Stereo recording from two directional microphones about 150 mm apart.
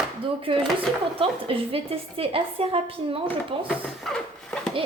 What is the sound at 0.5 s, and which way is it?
A woman's voice, 40° right (ahead or behind).